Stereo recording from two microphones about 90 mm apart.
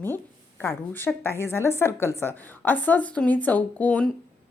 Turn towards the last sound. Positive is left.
turn(degrees=15)  # may be behind; listen again after turning